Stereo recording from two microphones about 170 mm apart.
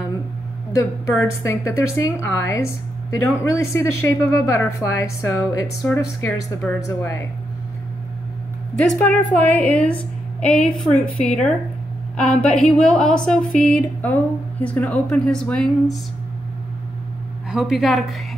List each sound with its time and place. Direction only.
1.1 s a woman's voice: 15° left (ahead or behind)
8.8 s a woman's voice: 5° left (ahead or behind)
17.5 s speech: 5° right (ahead or behind)